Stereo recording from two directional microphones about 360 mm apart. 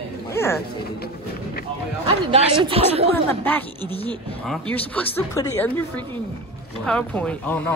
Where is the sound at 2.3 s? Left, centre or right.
Centre.